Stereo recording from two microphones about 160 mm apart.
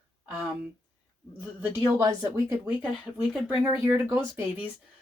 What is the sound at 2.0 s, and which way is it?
Speech, 20° right (ahead or behind).